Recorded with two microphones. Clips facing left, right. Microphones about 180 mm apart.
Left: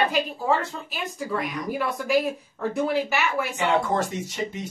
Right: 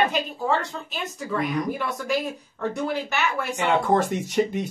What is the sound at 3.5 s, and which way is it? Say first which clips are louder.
Speech: right 4 dB; 60° right (ahead or behind).